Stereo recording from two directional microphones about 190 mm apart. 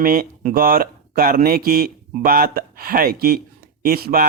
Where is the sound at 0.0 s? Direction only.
50° right (ahead or behind).